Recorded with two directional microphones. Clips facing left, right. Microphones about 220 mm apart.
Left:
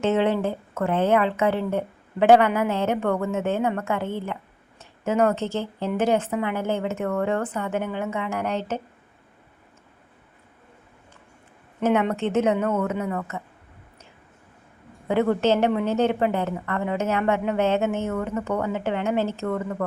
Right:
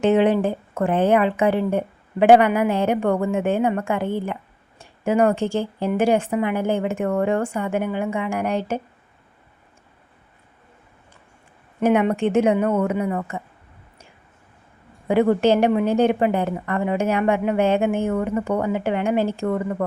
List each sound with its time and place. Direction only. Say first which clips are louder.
0.0 s a woman's voice: right 4 dB; 15° right (ahead or behind)
11.8 s a woman's voice: right 4 dB; 15° right (ahead or behind)
15.0 s a woman's voice: right 4 dB; 10° right (ahead or behind)